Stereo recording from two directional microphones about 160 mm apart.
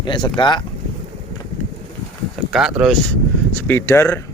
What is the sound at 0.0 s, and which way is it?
Speech, 30° left (ahead or behind).